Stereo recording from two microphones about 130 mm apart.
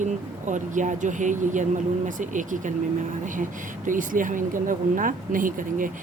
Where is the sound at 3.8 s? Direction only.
90° right.